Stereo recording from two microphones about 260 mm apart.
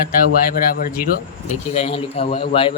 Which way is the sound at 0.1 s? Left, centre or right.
Left.